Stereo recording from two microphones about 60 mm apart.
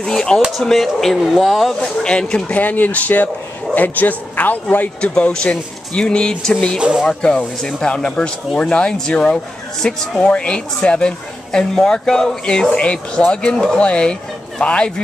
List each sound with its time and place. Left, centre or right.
0.0 s speech: centre
2.0 s speech: centre
5.0 s speech: centre
6.8 s speech: centre
7.1 s speech: centre